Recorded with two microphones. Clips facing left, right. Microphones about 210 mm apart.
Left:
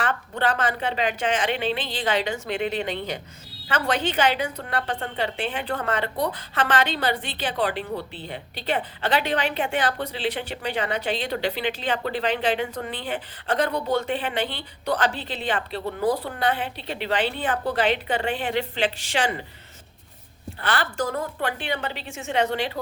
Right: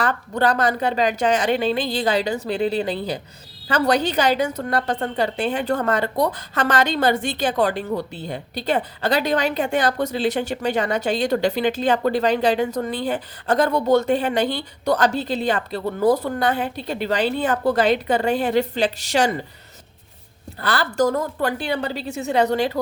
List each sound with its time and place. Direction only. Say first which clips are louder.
0.0 s a woman's voice: right 4 dB; 40° right (ahead or behind)
20.6 s a woman's voice: right 6 dB; 40° right (ahead or behind)